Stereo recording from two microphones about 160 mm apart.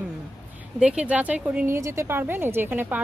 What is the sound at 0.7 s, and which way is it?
Speech, 5° right (ahead or behind).